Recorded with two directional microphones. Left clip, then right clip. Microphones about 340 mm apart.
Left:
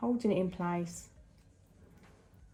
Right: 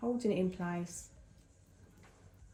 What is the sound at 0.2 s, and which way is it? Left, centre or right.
Speech, centre.